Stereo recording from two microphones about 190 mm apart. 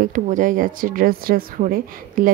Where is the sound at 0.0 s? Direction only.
45° right (ahead or behind).